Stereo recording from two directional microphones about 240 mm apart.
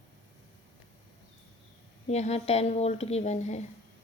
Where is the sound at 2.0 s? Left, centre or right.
Left.